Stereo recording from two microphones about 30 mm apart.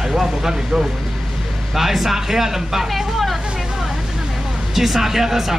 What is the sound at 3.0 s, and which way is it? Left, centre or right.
Vehicle, centre.